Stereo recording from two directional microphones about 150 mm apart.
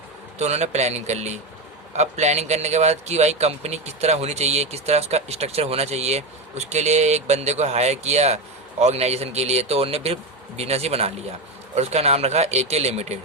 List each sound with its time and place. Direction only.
0.3 s a man's voice: 50° right (ahead or behind)